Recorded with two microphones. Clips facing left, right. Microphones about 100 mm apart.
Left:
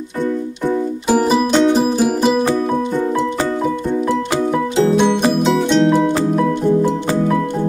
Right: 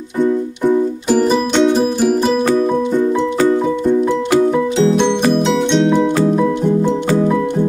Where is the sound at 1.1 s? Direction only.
5° left (ahead or behind).